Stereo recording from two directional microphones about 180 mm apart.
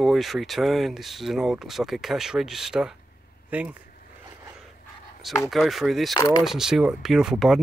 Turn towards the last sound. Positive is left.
turn(degrees=-5)  # may be behind; listen again after turning